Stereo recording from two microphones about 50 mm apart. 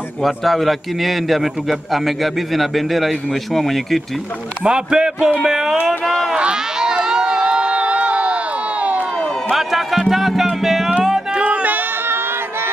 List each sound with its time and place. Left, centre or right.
0.2 s a man's voice: centre
4.6 s a man's voice: centre
6.3 s run: centre
7.1 s crowd: centre
9.5 s music: centre
11.3 s music: right